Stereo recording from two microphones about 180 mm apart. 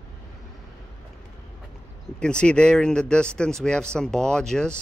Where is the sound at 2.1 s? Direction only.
5° left (ahead or behind).